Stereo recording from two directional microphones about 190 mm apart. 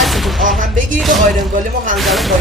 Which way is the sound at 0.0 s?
Centre (ahead or behind).